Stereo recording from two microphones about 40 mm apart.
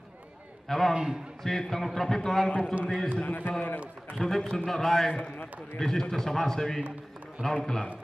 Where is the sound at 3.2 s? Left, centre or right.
Left.